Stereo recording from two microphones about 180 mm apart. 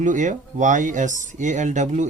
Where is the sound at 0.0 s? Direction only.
45° right (ahead or behind).